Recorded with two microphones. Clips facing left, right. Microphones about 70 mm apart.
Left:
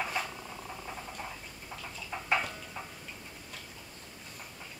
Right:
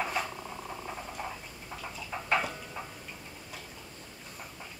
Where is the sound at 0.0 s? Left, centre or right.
Centre.